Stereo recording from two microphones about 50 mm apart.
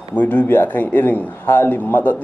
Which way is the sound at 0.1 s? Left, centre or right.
Left.